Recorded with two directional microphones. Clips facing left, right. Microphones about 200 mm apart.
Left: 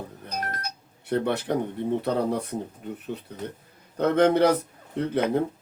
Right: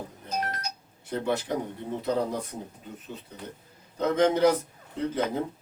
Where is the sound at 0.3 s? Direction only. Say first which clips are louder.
Right 1 dB; 60° left (ahead or behind).